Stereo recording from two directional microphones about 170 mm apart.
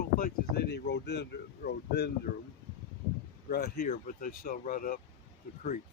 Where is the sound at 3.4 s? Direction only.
65° left (ahead or behind).